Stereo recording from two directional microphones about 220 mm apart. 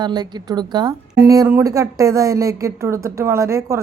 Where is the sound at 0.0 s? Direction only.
20° right (ahead or behind).